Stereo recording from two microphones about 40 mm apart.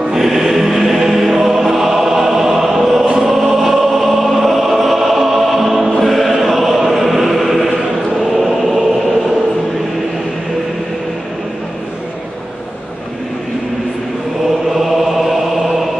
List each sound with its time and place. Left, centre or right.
0.1 s music: centre
1.4 s choir: centre
14.7 s chant: centre